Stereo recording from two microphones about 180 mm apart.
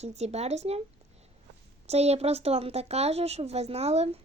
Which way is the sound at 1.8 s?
35° right (ahead or behind).